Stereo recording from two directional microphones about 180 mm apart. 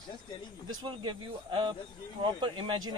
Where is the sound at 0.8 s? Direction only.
25° right (ahead or behind).